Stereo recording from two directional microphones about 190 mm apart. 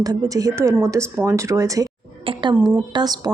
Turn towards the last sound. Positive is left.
turn(degrees=-20)  # may be behind; listen again after turning